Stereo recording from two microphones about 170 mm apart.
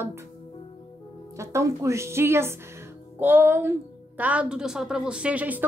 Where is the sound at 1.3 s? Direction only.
15° right (ahead or behind).